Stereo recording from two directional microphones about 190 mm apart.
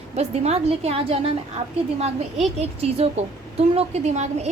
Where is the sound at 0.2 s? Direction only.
35° right (ahead or behind).